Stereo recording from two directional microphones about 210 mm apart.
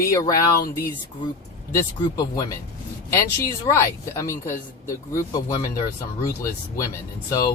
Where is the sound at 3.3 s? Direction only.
15° left (ahead or behind).